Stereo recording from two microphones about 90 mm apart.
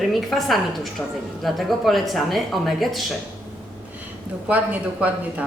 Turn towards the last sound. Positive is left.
turn(degrees=-15)  # may be behind; listen again after turning